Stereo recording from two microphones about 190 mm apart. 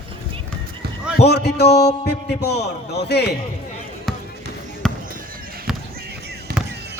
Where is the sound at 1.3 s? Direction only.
60° left (ahead or behind).